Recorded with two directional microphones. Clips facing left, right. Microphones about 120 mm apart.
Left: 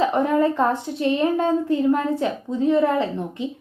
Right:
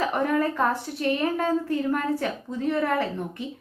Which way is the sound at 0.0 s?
20° left (ahead or behind).